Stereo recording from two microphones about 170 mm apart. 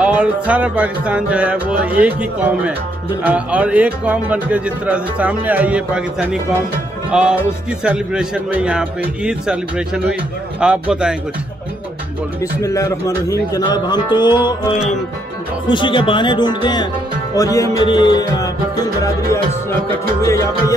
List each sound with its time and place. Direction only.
0.0 s speech: 10° right (ahead or behind)
7.1 s music: 5° right (ahead or behind)
7.8 s speech: 5° right (ahead or behind)
12.4 s a man's voice: 20° left (ahead or behind)
15.7 s a man's voice: 30° left (ahead or behind)